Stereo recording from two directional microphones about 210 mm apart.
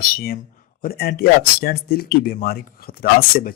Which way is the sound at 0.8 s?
45° left (ahead or behind).